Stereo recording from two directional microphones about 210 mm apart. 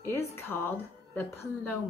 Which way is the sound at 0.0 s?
10° left (ahead or behind).